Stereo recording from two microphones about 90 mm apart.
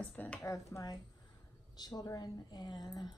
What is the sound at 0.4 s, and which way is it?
Speech, 35° left (ahead or behind).